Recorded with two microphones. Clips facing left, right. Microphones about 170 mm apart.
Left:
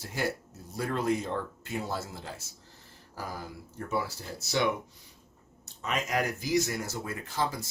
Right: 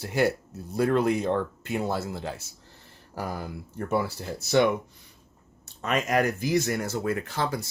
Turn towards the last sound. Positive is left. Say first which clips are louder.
# right 3 dB
turn(degrees=-65)  # may be behind; listen again after turning